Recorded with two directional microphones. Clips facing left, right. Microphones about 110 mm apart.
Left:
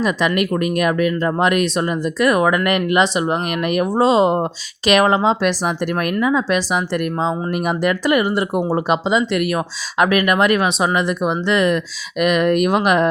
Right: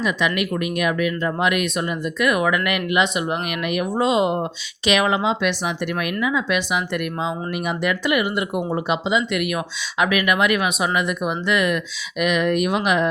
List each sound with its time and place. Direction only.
0.0 s speech: 40° left (ahead or behind)
4.9 s speech: 45° left (ahead or behind)